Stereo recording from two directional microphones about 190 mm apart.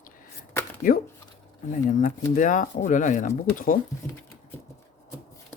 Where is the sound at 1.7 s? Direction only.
45° left (ahead or behind).